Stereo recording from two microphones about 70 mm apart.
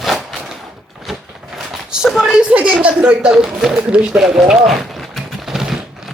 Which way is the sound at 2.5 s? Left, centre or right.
Centre.